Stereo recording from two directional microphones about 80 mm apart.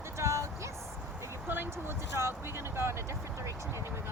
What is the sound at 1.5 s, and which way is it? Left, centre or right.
Speech, right.